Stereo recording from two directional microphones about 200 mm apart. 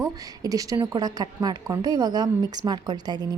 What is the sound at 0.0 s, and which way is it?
A woman's voice, 15° right (ahead or behind).